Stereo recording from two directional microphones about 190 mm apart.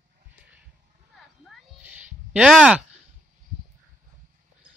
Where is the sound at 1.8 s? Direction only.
10° right (ahead or behind).